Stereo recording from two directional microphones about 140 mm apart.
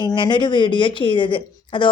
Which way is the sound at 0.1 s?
35° left (ahead or behind).